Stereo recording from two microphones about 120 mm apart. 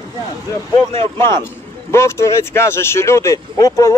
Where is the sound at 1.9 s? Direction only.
20° left (ahead or behind).